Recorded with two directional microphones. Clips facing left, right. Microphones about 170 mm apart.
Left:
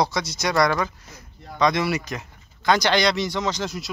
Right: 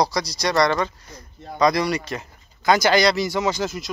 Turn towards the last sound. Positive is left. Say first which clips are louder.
# right 3 dB
turn(degrees=0)  # may be behind; listen again after turning